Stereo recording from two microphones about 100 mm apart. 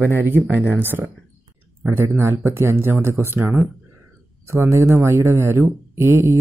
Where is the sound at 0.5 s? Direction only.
20° right (ahead or behind).